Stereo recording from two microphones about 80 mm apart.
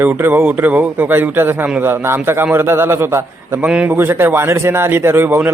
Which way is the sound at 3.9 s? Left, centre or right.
Right.